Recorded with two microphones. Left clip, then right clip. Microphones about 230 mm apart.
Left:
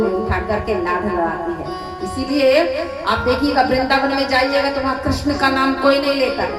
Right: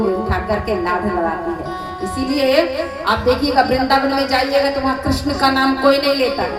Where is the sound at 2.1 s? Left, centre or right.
Right.